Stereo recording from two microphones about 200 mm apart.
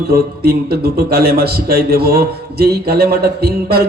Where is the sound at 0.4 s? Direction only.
50° right (ahead or behind).